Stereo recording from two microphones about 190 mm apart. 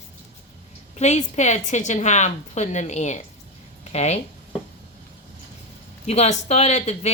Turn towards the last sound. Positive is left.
turn(degrees=35)  # may be behind; listen again after turning